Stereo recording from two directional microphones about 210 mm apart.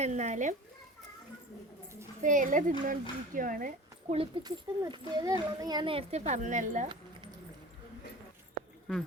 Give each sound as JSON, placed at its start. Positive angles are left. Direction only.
{"t": 0.0, "sound": "speech", "side_deg": -35}
{"t": 2.2, "sound": "speech", "side_deg": -40}
{"t": 4.1, "sound": "a child's voice", "side_deg": -25}